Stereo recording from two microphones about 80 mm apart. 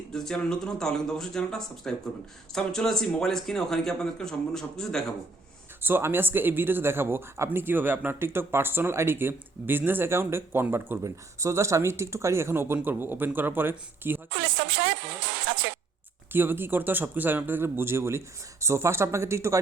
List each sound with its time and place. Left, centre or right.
0.1 s a man's voice: centre
5.8 s speech: right
11.0 s speech: right
16.3 s speech: right